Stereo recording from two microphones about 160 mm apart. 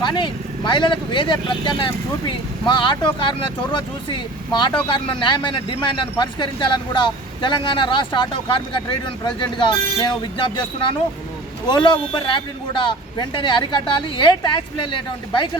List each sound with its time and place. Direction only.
0.0 s speech: 30° left (ahead or behind)
11.7 s speech: 30° left (ahead or behind)